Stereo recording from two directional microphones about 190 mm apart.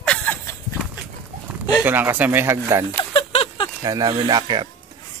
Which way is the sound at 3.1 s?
30° left (ahead or behind).